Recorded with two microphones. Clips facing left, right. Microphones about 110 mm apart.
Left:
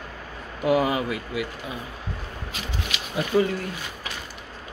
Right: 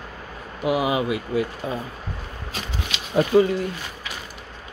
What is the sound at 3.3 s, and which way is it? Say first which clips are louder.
Speech: right 4 dB; 30° right (ahead or behind).